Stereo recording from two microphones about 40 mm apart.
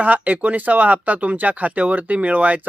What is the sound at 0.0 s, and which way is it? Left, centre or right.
Speech, right.